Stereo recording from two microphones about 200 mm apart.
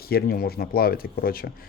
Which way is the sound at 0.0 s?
50° left (ahead or behind).